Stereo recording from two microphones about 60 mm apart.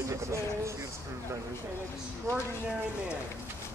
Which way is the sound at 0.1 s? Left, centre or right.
Right.